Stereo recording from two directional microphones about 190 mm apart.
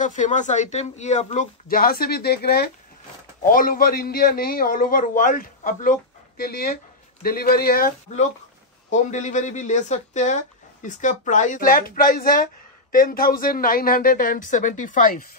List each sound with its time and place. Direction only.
0.0 s a man's voice: 40° left (ahead or behind)
8.9 s a man's voice: 40° left (ahead or behind)